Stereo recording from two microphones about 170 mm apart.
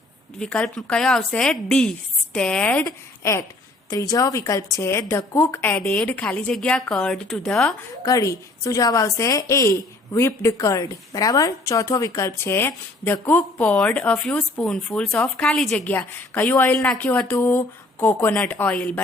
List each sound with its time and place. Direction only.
0.3 s speech: 5° left (ahead or behind)
2.8 s a woman's voice: 20° left (ahead or behind); by 7.8 s centre (ahead or behind)
8.0 s a woman's voice: 20° left (ahead or behind)